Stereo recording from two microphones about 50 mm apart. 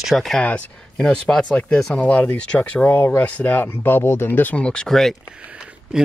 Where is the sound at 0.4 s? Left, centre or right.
Left.